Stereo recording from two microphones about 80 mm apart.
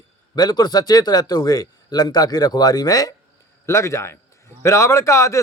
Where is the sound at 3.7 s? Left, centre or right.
Left.